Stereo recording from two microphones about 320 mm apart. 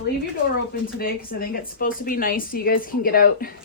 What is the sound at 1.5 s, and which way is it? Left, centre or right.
Speech, left.